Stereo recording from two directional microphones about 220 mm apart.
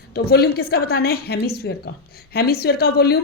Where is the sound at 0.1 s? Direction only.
45° left (ahead or behind).